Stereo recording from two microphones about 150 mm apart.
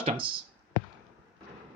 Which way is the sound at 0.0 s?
40° right (ahead or behind).